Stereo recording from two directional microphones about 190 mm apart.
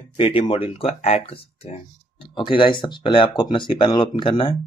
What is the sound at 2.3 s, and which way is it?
Speech, 25° left (ahead or behind).